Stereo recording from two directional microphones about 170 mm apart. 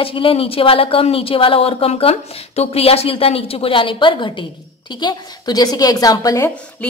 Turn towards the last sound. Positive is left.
turn(degrees=20)  # may be behind; listen again after turning